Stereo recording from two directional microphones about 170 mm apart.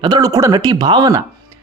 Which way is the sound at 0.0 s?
25° right (ahead or behind).